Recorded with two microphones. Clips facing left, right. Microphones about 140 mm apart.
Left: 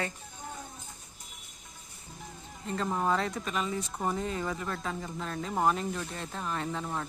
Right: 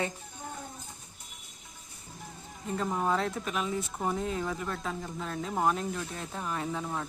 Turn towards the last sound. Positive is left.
turn(degrees=-5)  # may be behind; listen again after turning